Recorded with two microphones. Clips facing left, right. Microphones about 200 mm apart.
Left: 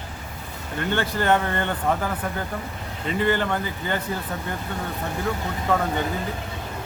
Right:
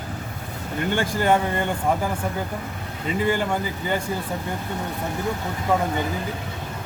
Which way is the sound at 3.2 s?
10° right (ahead or behind).